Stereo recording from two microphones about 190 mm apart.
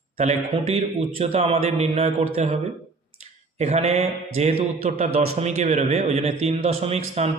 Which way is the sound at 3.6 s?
35° right (ahead or behind).